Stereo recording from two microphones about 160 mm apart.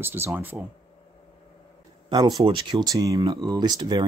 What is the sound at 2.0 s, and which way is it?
Speech, 25° right (ahead or behind).